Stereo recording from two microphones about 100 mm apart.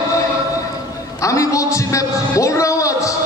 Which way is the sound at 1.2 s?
30° left (ahead or behind).